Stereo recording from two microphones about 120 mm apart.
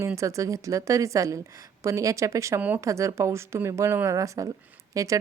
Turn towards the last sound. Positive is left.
turn(degrees=-25)  # may be behind; listen again after turning